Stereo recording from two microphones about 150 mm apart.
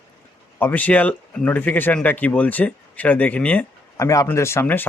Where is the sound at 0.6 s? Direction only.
10° left (ahead or behind).